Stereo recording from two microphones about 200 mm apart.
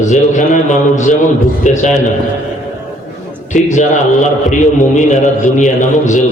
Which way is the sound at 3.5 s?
35° left (ahead or behind).